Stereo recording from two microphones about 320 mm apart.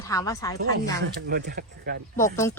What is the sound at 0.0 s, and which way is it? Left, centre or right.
Speech, centre.